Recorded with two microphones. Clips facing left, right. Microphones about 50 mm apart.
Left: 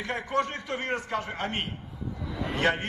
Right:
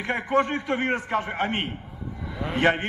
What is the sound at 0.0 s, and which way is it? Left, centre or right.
A man's voice, right.